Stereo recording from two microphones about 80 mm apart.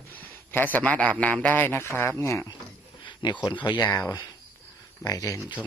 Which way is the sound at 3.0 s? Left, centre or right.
Left.